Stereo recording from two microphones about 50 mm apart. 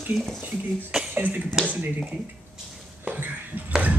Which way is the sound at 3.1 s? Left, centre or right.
Right.